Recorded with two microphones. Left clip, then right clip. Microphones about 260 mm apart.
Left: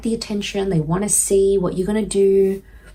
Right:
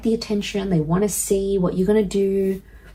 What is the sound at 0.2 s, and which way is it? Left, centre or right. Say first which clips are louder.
Speech: left 1 dB; left.